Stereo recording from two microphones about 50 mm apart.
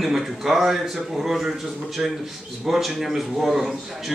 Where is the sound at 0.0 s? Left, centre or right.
Centre.